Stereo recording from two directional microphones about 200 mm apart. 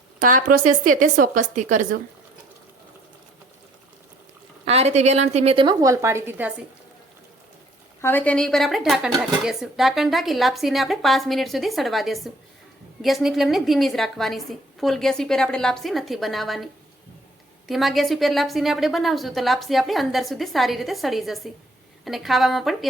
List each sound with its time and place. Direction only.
0.2 s a woman's voice: 40° right (ahead or behind)
4.6 s a woman's voice: 30° right (ahead or behind); by 6.5 s 10° right (ahead or behind)
8.0 s speech: 10° left (ahead or behind)
17.7 s speech: centre (ahead or behind)